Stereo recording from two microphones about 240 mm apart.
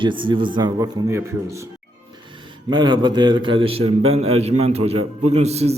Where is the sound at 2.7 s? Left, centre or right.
Centre.